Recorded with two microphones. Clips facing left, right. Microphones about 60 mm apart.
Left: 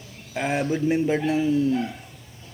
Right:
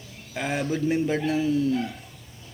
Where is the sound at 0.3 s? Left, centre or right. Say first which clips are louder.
Left 3 dB; centre.